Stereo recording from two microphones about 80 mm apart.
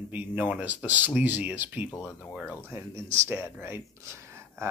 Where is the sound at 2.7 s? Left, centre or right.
Right.